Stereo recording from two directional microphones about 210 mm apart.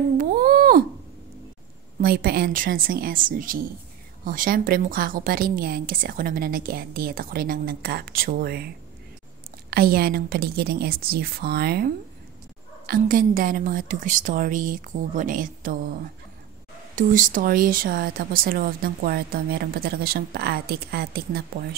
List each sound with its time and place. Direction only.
0.2 s a sound: 45° right (ahead or behind)
2.0 s speech: 45° right (ahead or behind)
9.7 s a woman's voice: 45° right (ahead or behind)